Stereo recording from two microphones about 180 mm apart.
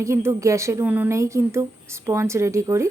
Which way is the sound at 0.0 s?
15° right (ahead or behind).